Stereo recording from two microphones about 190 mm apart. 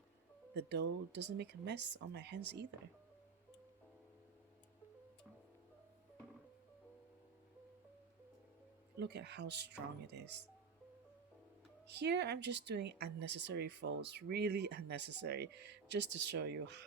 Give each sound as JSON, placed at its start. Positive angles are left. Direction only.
{"t": 0.5, "sound": "speech", "side_deg": -65}
{"t": 9.0, "sound": "speech", "side_deg": -65}
{"t": 11.9, "sound": "speech", "side_deg": -65}